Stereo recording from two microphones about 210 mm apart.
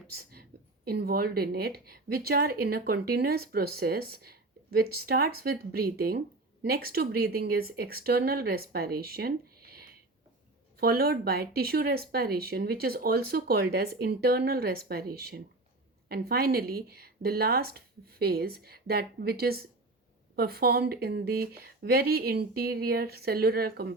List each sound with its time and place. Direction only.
0.2 s a woman's voice: 45° right (ahead or behind)